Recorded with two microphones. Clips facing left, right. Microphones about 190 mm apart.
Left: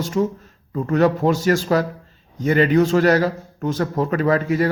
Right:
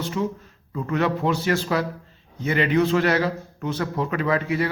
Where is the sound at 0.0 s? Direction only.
45° left (ahead or behind).